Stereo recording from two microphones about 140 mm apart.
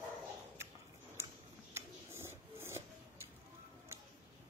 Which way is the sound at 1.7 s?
20° right (ahead or behind).